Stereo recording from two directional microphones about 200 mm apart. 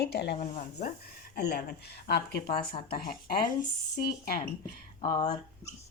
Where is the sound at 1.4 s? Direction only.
55° left (ahead or behind).